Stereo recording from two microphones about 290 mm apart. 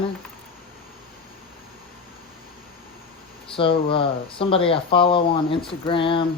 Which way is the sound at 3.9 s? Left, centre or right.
Centre.